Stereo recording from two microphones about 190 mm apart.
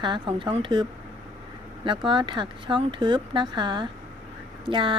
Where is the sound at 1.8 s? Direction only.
25° right (ahead or behind).